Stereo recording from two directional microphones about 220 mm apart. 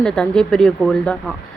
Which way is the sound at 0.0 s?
5° left (ahead or behind).